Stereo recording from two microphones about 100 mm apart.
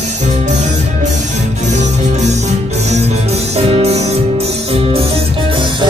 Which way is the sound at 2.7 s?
90° right.